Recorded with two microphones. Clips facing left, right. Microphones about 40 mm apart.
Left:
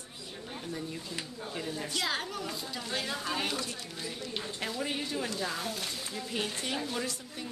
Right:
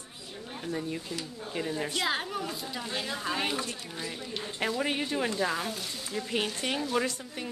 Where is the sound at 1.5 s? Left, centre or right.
Right.